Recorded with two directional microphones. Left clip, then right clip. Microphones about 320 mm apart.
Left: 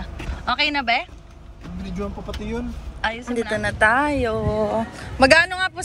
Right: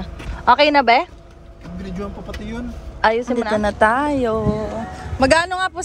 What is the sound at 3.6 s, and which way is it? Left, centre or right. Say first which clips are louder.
Speech: right 1 dB; centre.